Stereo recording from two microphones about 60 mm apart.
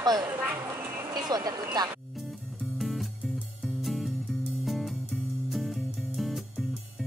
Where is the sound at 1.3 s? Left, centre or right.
Right.